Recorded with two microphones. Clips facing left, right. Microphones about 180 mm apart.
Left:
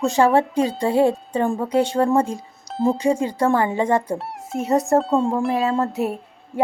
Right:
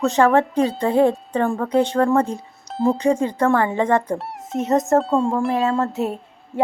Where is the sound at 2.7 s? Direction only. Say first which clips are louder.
Even; centre (ahead or behind).